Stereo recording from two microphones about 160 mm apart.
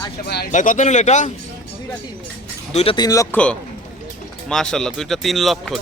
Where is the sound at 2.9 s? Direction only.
20° left (ahead or behind).